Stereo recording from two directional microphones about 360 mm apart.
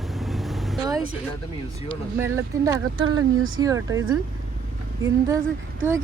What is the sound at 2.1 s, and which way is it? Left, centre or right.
Speech, centre.